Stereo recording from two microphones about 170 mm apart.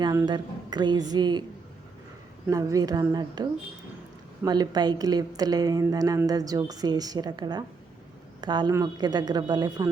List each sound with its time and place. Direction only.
0.0 s a woman's voice: 20° right (ahead or behind)
2.5 s a woman's voice: 20° right (ahead or behind)
4.4 s a woman's voice: 25° right (ahead or behind)